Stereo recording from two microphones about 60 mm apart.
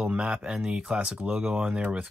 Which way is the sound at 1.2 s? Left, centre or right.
Right.